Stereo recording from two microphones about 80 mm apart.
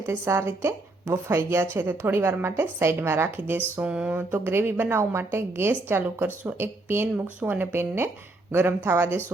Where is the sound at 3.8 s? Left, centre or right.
Centre.